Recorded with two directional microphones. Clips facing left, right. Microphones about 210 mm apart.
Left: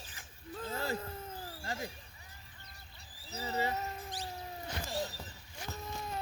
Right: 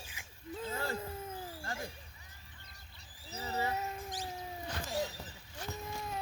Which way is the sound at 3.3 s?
20° left (ahead or behind).